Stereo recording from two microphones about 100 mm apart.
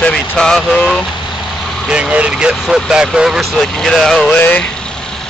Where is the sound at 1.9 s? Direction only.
10° right (ahead or behind).